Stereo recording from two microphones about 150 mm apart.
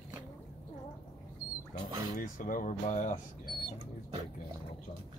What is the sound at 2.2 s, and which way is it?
Speech, 60° left (ahead or behind).